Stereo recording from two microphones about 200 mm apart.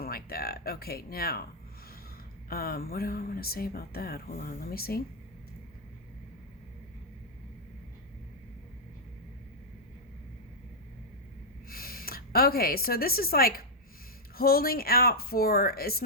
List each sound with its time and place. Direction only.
0.0 s speech: 50° left (ahead or behind)
2.5 s speech: 50° left (ahead or behind)
11.7 s a woman's voice: 50° left (ahead or behind)